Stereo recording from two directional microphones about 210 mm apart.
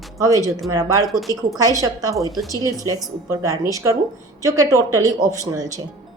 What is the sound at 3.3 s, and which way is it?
A woman's voice, 15° right (ahead or behind).